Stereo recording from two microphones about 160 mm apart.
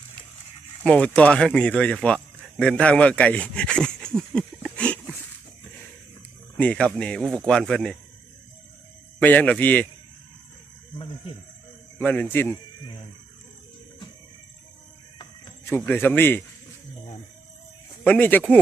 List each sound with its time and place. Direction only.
0.9 s speech: 5° left (ahead or behind)
6.6 s speech: 5° left (ahead or behind)
9.1 s a man's voice: 10° left (ahead or behind)
11.9 s a man's voice: 10° left (ahead or behind)
15.9 s a man's voice: 10° left (ahead or behind)
18.0 s a man's voice: 10° left (ahead or behind)